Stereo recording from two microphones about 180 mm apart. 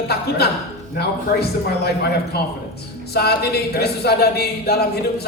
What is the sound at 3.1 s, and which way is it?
Speech, 60° left (ahead or behind).